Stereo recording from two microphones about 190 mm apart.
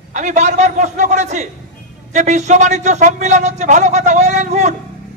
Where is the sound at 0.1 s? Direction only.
40° right (ahead or behind).